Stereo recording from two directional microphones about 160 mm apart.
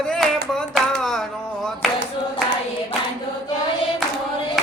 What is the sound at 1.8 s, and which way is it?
Clapping, centre (ahead or behind).